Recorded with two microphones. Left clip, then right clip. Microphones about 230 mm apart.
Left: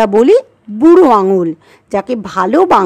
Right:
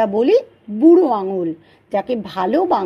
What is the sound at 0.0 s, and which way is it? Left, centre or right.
A woman's voice, left.